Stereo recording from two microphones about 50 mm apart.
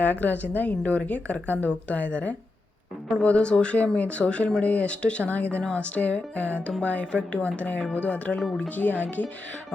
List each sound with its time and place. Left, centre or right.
0.0 s a woman's voice: left